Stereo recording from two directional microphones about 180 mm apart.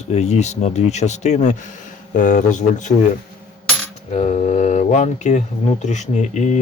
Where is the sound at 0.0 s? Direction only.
40° left (ahead or behind).